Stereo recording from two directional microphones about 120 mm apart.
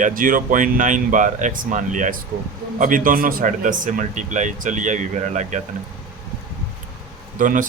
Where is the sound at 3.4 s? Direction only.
90° right.